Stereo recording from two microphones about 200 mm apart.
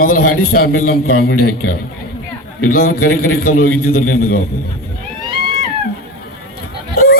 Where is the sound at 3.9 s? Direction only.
90° left.